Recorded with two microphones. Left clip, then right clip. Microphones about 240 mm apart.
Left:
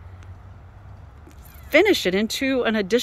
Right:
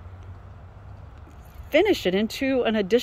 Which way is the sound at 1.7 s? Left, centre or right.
Centre.